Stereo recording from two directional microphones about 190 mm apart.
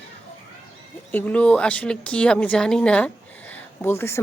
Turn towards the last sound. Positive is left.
turn(degrees=10)  # may be behind; listen again after turning